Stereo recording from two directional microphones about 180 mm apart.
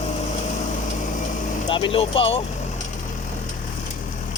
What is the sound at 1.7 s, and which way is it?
Speech, 30° left (ahead or behind).